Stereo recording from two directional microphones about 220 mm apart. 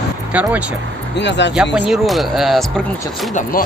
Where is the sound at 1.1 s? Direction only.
55° left (ahead or behind).